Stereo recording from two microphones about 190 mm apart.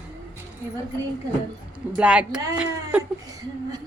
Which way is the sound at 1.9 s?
5° right (ahead or behind).